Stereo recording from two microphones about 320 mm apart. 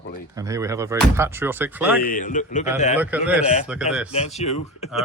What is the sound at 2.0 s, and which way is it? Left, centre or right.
Speech, left.